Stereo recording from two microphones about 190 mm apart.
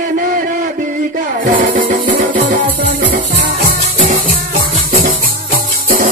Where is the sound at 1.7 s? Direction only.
45° right (ahead or behind).